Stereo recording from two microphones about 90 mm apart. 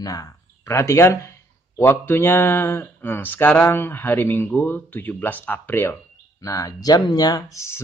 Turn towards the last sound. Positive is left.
turn(degrees=30)  # may be behind; listen again after turning